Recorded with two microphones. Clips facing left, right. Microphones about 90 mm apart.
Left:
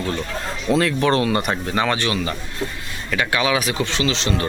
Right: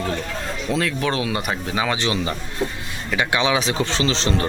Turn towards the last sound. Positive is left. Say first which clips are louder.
# even
turn(degrees=-35)  # may be behind; listen again after turning